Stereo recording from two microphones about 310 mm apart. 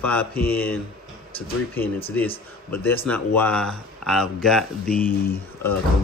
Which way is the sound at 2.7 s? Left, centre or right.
Centre.